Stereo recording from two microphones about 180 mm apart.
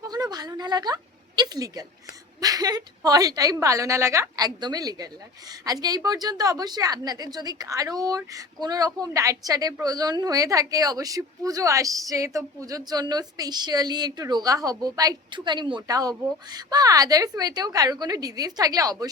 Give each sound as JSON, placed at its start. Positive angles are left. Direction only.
{"t": 0.0, "sound": "a woman's voice", "side_deg": -20}